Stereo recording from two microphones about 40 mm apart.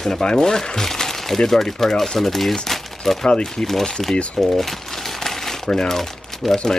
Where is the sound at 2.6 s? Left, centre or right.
Centre.